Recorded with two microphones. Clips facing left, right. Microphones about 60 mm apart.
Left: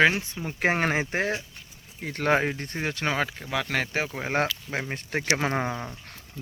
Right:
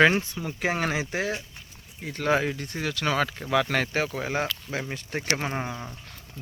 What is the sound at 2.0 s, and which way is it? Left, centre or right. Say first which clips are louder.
Speech: left 1 dB; left.